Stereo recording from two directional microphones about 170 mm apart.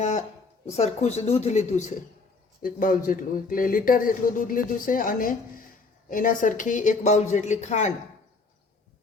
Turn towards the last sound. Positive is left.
turn(degrees=45)  # may be behind; listen again after turning